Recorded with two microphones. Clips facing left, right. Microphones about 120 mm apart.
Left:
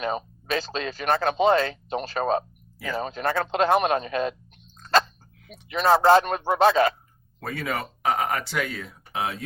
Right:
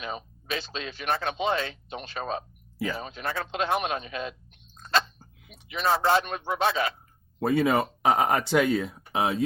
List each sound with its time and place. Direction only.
0.0 s speech: 45° left (ahead or behind)
5.6 s speech: 45° left (ahead or behind)
7.3 s speech: 20° right (ahead or behind)